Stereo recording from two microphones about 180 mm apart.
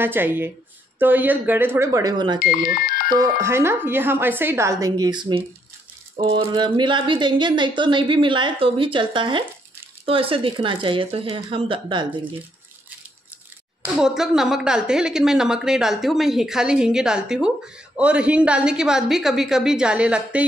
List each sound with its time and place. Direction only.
0.0 s a woman's voice: 10° right (ahead or behind)
2.7 s music: 55° left (ahead or behind)
3.2 s a woman's voice: 15° right (ahead or behind)
6.1 s rattle: 35° right (ahead or behind)
6.4 s speech: 25° right (ahead or behind)
13.9 s a woman's voice: 5° right (ahead or behind)